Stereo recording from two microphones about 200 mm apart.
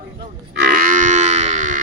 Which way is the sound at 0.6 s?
40° right (ahead or behind).